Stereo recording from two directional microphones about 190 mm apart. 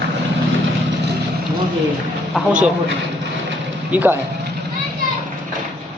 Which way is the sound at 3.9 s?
10° right (ahead or behind).